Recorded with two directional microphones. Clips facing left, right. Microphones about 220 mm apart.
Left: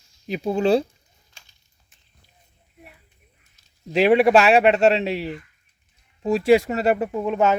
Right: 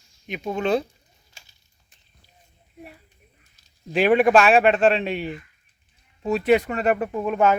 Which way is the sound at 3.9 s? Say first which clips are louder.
Left 1 dB; 25° left (ahead or behind).